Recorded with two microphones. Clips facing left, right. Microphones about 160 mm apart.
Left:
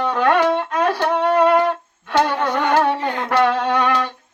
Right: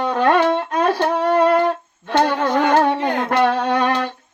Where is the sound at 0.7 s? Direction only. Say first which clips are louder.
Right 1 dB; 40° right (ahead or behind).